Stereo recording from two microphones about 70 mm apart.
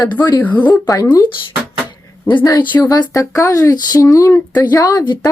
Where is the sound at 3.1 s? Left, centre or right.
Left.